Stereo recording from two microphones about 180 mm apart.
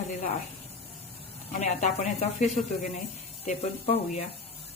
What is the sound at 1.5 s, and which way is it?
Speech, 40° left (ahead or behind).